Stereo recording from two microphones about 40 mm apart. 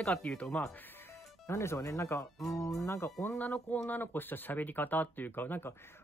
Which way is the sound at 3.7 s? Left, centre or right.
Left.